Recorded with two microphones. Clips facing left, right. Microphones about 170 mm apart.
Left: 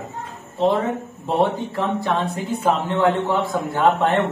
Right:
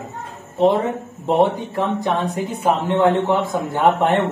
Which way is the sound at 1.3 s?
15° right (ahead or behind).